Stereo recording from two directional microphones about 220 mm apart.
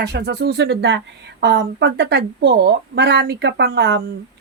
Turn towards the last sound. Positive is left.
turn(degrees=-50)  # may be behind; listen again after turning